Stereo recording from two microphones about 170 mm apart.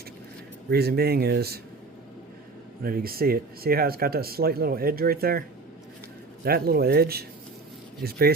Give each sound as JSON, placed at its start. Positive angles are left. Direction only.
{"t": 0.7, "sound": "speech", "side_deg": -70}
{"t": 2.8, "sound": "speech", "side_deg": -60}
{"t": 6.4, "sound": "speech", "side_deg": -65}